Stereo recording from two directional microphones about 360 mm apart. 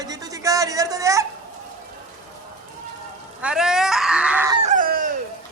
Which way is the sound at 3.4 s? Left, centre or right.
Centre.